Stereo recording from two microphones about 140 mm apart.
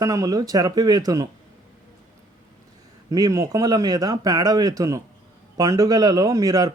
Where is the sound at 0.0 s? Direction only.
25° right (ahead or behind).